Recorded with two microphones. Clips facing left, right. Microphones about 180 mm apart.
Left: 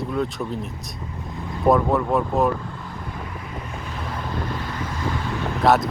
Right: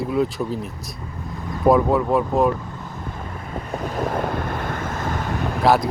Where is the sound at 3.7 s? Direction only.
45° right (ahead or behind).